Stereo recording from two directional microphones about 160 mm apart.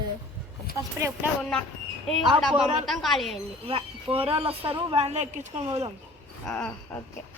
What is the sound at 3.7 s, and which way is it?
A woman's voice, 35° right (ahead or behind).